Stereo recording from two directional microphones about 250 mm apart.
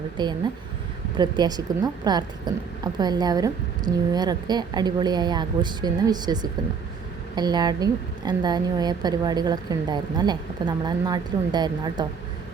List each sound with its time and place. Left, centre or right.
0.2 s a woman's voice: centre